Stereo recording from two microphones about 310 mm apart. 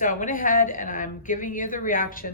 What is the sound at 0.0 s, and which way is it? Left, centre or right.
A woman's voice, left.